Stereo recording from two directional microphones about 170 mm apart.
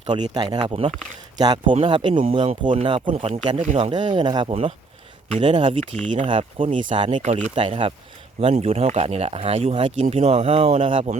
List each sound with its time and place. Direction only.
0.0 s speech: 25° right (ahead or behind)
3.1 s speech: 40° right (ahead or behind)
7.2 s speech: 45° right (ahead or behind)
7.5 s speech: 30° right (ahead or behind)